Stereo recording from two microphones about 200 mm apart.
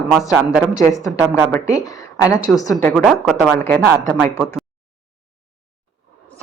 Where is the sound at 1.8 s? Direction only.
15° left (ahead or behind).